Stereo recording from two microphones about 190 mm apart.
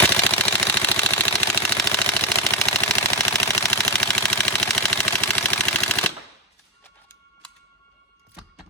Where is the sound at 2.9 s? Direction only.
15° left (ahead or behind).